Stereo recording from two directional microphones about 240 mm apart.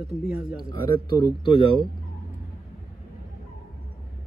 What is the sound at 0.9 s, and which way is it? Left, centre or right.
Speech, left.